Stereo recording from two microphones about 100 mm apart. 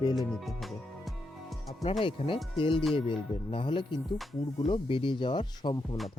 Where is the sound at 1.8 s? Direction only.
65° left (ahead or behind); by 6.0 s 50° left (ahead or behind).